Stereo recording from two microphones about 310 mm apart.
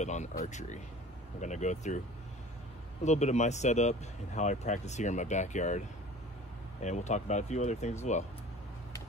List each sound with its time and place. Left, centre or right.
0.0 s speech: left
3.0 s speech: left